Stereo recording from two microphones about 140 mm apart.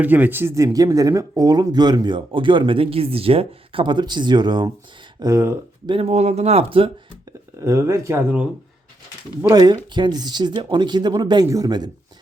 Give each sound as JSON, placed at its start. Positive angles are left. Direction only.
{"t": 0.0, "sound": "speech", "side_deg": -10}
{"t": 5.9, "sound": "speech", "side_deg": -45}
{"t": 7.6, "sound": "speech", "side_deg": -20}
{"t": 9.4, "sound": "speech", "side_deg": -25}